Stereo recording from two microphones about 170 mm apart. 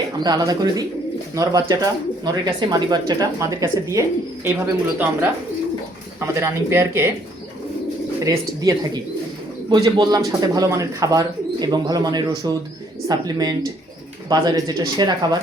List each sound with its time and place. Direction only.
0.2 s speech: 20° right (ahead or behind)
8.2 s speech: 20° right (ahead or behind)